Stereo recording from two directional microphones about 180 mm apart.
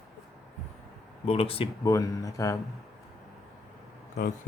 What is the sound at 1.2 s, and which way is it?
Speech, 35° left (ahead or behind).